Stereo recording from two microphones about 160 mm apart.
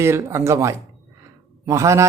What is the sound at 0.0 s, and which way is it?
Speech, 15° right (ahead or behind).